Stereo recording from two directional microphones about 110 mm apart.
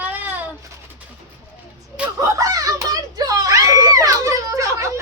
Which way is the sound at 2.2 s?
30° right (ahead or behind).